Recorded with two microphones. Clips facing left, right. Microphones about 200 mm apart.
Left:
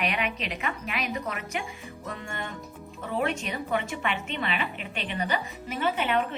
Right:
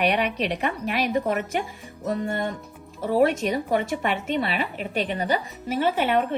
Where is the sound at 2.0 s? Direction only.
40° right (ahead or behind).